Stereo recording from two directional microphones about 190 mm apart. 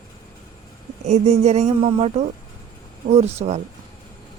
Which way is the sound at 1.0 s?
35° right (ahead or behind).